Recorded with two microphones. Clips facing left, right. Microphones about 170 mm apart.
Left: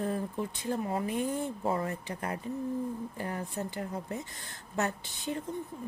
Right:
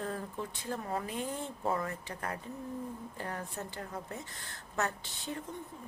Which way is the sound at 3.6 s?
20° left (ahead or behind).